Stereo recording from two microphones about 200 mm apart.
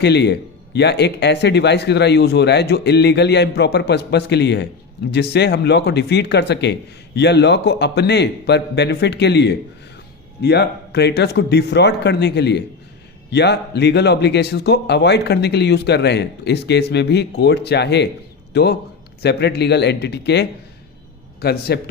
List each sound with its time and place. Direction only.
0.0 s a man's voice: 55° left (ahead or behind)